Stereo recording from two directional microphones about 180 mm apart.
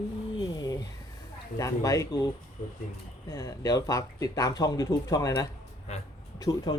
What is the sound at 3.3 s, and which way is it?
Speech, 20° left (ahead or behind).